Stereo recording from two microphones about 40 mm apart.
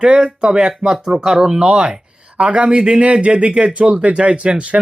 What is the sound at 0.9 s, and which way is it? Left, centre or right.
Speech, centre.